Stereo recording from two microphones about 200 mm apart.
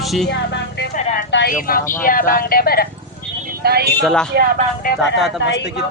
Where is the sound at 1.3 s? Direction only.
50° left (ahead or behind).